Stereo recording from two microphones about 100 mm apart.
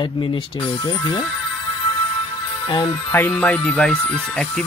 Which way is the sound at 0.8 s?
50° left (ahead or behind).